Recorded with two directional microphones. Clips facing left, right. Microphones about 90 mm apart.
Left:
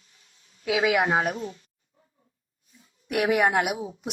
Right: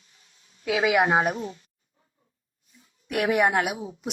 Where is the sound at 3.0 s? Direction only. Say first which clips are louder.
Left 1 dB; 15° left (ahead or behind).